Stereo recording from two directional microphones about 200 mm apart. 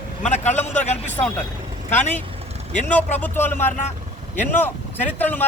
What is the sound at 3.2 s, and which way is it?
Speech, 10° left (ahead or behind).